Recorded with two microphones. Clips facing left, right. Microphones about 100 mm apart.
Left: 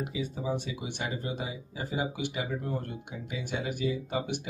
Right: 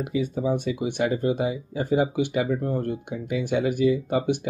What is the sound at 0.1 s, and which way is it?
Speech, 50° right (ahead or behind).